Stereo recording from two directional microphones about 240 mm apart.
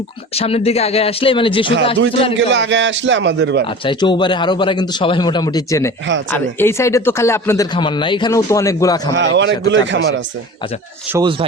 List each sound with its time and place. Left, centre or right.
0.3 s speech: left
2.3 s a man's voice: right
3.8 s speech: centre
9.1 s a man's voice: right
11.1 s speech: centre